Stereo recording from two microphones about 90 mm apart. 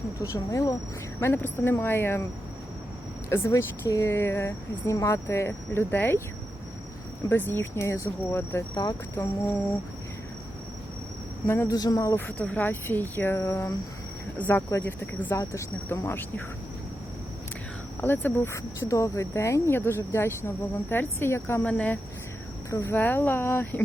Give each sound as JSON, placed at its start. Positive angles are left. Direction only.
{"t": 0.2, "sound": "speech", "side_deg": 40}
{"t": 1.2, "sound": "speech", "side_deg": 25}
{"t": 3.2, "sound": "speech", "side_deg": 30}
{"t": 7.3, "sound": "speech", "side_deg": 25}
{"t": 8.7, "sound": "speech", "side_deg": 50}
{"t": 9.2, "sound": "speech", "side_deg": 25}
{"t": 11.4, "sound": "speech", "side_deg": 25}
{"t": 11.7, "sound": "speech", "side_deg": 40}
{"t": 12.1, "sound": "speech", "side_deg": 20}
{"t": 18.0, "sound": "speech", "side_deg": 20}
{"t": 21.6, "sound": "speech", "side_deg": 15}
{"t": 22.7, "sound": "speech", "side_deg": 30}
{"t": 23.0, "sound": "speech", "side_deg": 20}